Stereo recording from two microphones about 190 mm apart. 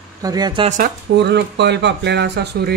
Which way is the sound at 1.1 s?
65° right (ahead or behind).